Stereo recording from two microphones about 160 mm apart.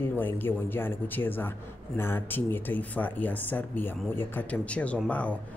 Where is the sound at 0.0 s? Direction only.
10° left (ahead or behind).